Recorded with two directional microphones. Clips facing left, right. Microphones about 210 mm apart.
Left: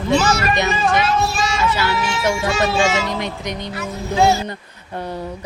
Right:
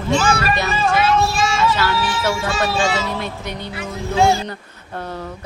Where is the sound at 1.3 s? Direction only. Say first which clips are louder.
Right 2 dB; 10° left (ahead or behind).